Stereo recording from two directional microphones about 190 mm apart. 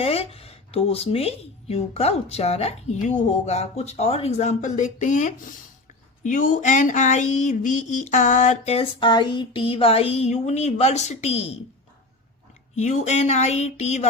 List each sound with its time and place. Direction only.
0.0 s speech: 30° left (ahead or behind)
12.7 s speech: 35° left (ahead or behind)